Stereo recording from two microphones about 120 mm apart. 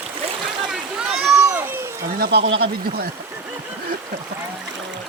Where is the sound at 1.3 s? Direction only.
20° right (ahead or behind).